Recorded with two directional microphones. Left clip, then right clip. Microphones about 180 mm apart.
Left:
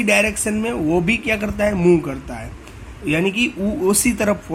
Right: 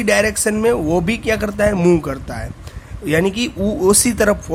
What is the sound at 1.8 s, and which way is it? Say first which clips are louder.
Speech: right 1 dB; 40° right (ahead or behind).